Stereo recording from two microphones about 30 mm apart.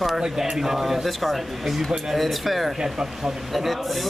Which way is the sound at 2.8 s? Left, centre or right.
Centre.